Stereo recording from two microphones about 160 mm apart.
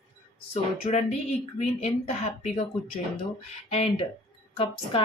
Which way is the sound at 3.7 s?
40° left (ahead or behind).